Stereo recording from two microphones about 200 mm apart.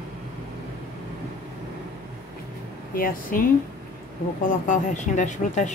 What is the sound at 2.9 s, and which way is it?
Speech, 45° left (ahead or behind).